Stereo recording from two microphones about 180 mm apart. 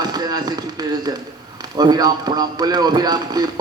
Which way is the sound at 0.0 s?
20° right (ahead or behind).